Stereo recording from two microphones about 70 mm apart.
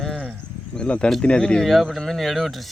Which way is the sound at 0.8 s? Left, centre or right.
Centre.